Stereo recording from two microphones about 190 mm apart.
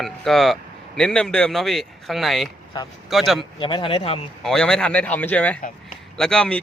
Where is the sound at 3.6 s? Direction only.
25° left (ahead or behind).